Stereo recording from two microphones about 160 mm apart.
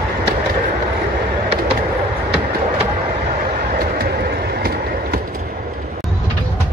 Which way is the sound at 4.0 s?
75° right (ahead or behind).